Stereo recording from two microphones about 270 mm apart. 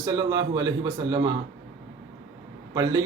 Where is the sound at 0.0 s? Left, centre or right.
Centre.